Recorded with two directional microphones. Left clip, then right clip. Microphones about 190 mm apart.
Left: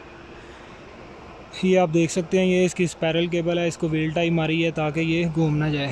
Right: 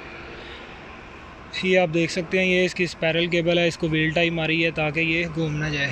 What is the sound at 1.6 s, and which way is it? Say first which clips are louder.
Speech: even; 15° left (ahead or behind).